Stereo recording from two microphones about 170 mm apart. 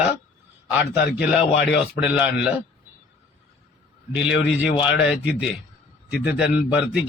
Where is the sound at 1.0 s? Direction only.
75° left (ahead or behind).